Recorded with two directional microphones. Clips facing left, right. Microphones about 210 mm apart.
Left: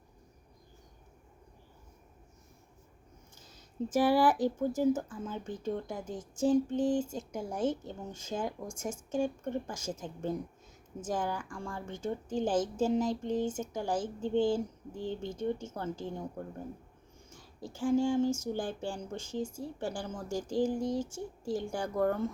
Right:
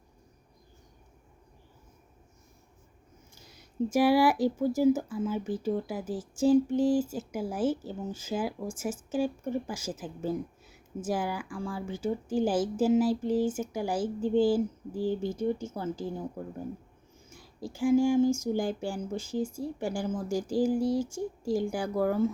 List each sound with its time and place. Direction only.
3.3 s speech: 10° right (ahead or behind)
17.2 s speech: 10° right (ahead or behind)